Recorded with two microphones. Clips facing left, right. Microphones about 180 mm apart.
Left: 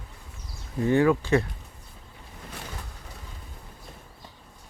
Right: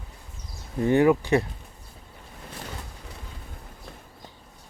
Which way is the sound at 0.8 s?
20° right (ahead or behind).